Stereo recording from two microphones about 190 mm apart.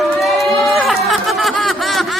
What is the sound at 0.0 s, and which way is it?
Sheep, centre (ahead or behind).